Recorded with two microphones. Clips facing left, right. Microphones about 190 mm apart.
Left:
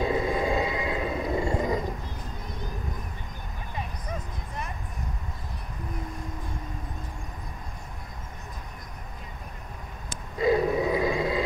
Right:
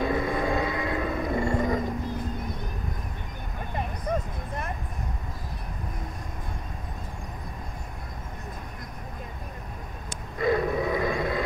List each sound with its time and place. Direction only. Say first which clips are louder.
0.0 s wild animals: even; 15° left (ahead or behind)
3.7 s vehicle: right 7 dB; 55° right (ahead or behind)
10.4 s a sound: left 2 dB; 15° left (ahead or behind)